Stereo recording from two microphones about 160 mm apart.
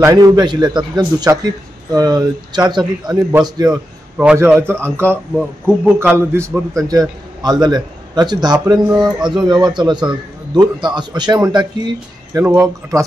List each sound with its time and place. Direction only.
0.0 s a man's voice: 25° right (ahead or behind)
4.2 s a man's voice: 5° right (ahead or behind)